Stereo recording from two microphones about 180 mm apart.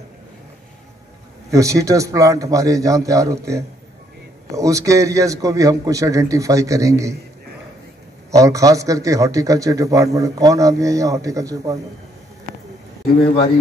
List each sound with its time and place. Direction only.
1.5 s a man's voice: 15° right (ahead or behind)
8.4 s a man's voice: 20° right (ahead or behind)